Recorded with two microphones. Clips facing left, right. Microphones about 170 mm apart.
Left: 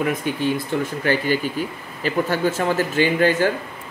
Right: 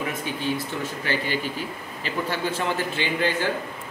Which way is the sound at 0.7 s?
55° left (ahead or behind).